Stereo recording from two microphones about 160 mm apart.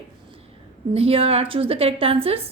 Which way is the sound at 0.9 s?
35° right (ahead or behind).